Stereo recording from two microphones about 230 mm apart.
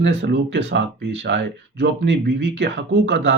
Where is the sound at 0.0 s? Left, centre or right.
Right.